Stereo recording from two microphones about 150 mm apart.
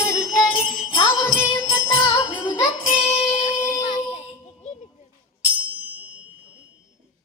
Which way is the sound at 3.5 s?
20° left (ahead or behind).